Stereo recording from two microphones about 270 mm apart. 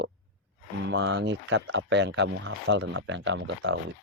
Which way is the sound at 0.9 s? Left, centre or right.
Right.